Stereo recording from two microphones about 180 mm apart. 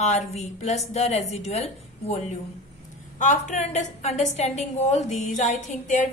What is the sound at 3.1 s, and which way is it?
A woman's voice, 45° left (ahead or behind).